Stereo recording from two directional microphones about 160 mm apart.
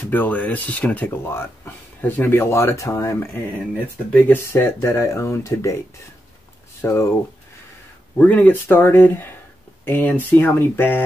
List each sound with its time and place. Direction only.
0.1 s speech: 10° left (ahead or behind)
6.8 s speech: 15° left (ahead or behind)
8.2 s speech: 10° left (ahead or behind)